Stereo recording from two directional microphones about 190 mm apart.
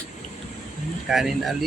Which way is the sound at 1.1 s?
Centre (ahead or behind).